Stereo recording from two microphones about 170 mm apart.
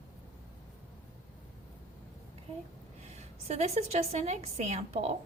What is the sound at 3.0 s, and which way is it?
A woman's voice, 40° right (ahead or behind).